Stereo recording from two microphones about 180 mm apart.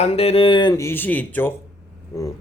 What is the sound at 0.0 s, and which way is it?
A man's voice, 35° left (ahead or behind).